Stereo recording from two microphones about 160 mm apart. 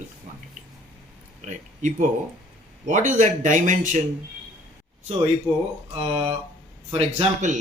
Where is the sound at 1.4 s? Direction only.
50° right (ahead or behind).